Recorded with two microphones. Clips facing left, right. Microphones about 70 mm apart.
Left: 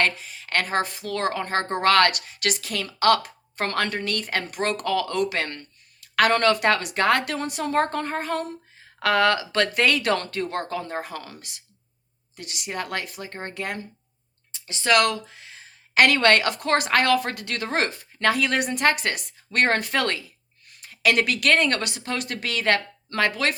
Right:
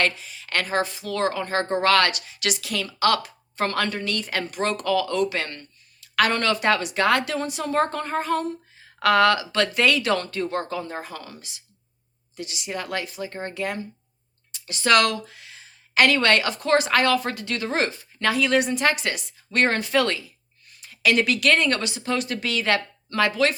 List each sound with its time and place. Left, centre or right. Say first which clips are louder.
0.0 s speech: even; left
9.0 s speech: right 2 dB; left
14.5 s a sound: right 1 dB; left
14.8 s speech: right 1 dB; centre
16.0 s speech: left 1 dB; left